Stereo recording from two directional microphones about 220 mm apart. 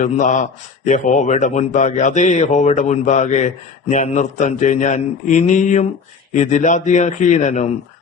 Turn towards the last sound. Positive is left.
turn(degrees=30)  # may be behind; listen again after turning